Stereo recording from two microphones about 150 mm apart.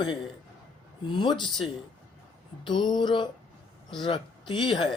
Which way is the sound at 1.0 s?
30° left (ahead or behind).